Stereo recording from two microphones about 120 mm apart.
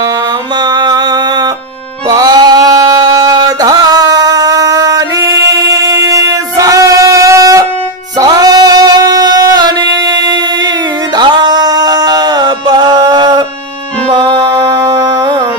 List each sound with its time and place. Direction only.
0.7 s music: 35° right (ahead or behind)
2.0 s a sound: 30° right (ahead or behind)
8.2 s music: 30° right (ahead or behind)
11.1 s music: 35° right (ahead or behind)